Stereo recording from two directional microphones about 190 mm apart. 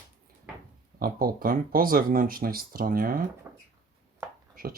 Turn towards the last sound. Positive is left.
turn(degrees=-50)  # may be behind; listen again after turning